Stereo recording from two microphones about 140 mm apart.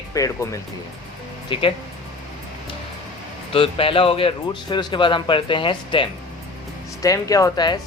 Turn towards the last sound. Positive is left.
turn(degrees=30)  # may be behind; listen again after turning